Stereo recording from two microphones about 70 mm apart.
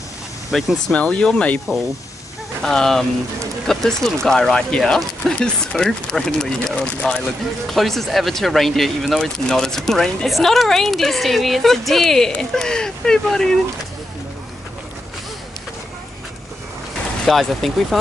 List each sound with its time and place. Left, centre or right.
0.5 s speech: centre
0.9 s speech: centre
2.6 s speech: centre
17.3 s speech: centre